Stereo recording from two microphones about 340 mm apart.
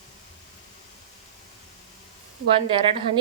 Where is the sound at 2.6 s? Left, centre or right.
Centre.